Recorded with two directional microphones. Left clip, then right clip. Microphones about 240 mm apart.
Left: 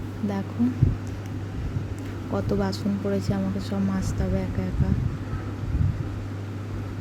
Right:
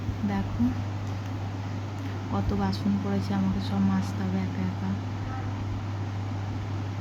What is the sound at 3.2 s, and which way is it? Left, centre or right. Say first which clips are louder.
Speech: left 1 dB; centre.